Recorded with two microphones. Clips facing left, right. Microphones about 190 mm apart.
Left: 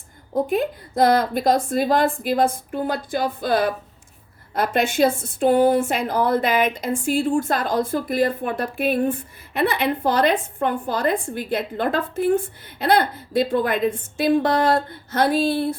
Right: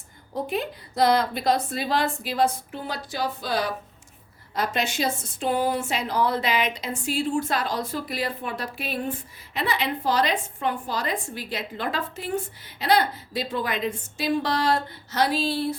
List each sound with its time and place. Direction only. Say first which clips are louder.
0.3 s speech: left 7 dB; 50° left (ahead or behind)